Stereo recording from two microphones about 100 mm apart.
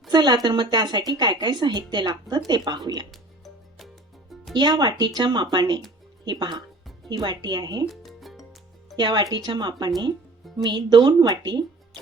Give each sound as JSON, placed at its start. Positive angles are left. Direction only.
{"t": 0.1, "sound": "a sound", "side_deg": -45}
{"t": 0.4, "sound": "speech", "side_deg": -50}
{"t": 4.5, "sound": "speech", "side_deg": -45}
{"t": 7.9, "sound": "music", "side_deg": 0}
{"t": 9.0, "sound": "speech", "side_deg": -50}